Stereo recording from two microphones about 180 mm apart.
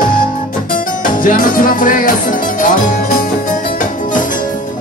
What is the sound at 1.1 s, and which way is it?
Music, 50° left (ahead or behind).